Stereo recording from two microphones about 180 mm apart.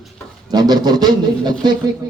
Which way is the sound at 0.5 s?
20° right (ahead or behind).